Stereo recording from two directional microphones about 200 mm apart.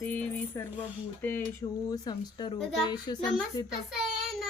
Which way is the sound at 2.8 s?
20° left (ahead or behind).